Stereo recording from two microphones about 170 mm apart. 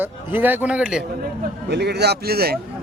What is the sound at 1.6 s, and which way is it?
Speech, 75° right (ahead or behind).